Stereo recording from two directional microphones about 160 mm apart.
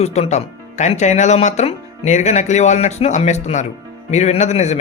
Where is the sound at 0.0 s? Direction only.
40° left (ahead or behind).